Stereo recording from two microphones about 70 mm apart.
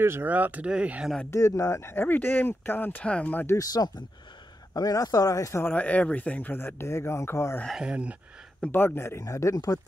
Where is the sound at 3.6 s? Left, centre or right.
Left.